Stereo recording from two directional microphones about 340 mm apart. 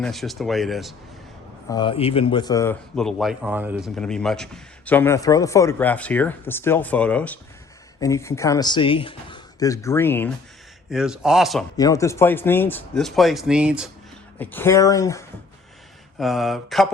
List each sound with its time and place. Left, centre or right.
0.0 s speech: centre
1.7 s speech: centre